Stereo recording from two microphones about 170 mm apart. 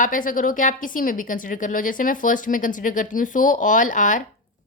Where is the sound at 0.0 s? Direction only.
50° left (ahead or behind).